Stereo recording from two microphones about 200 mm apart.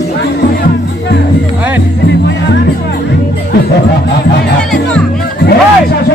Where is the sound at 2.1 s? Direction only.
60° left (ahead or behind).